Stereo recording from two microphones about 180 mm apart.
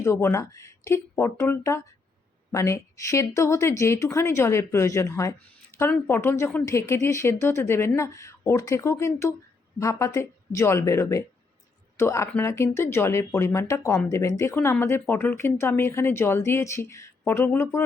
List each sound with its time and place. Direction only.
0.0 s speech: 15° left (ahead or behind)